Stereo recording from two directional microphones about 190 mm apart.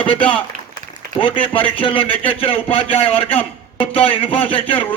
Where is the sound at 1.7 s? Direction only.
30° left (ahead or behind).